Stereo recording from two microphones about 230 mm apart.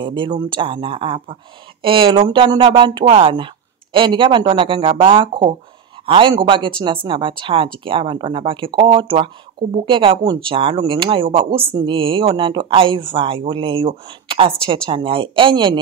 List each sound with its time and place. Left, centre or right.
0.0 s speech: right